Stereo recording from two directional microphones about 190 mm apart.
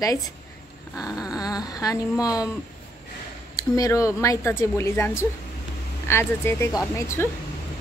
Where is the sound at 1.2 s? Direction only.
20° left (ahead or behind).